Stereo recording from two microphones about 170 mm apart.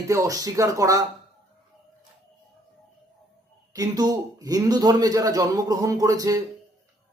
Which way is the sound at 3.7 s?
20° right (ahead or behind).